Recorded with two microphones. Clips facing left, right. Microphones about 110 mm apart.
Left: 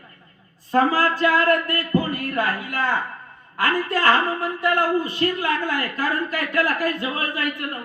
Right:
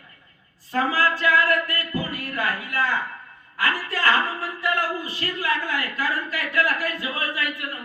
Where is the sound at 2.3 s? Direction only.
25° left (ahead or behind).